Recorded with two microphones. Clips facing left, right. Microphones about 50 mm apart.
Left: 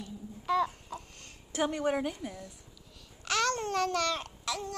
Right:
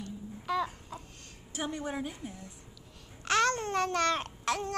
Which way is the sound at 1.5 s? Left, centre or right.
Left.